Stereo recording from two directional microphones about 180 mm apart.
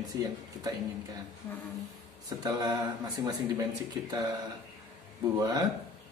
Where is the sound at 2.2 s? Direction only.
20° right (ahead or behind).